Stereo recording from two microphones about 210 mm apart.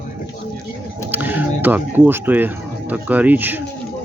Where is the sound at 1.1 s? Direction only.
10° right (ahead or behind).